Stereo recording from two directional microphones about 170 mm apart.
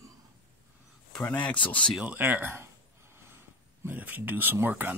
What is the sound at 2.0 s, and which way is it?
Speech, 10° right (ahead or behind).